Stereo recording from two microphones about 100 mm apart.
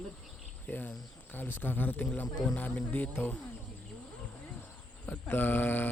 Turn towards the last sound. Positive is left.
turn(degrees=20)  # may be behind; listen again after turning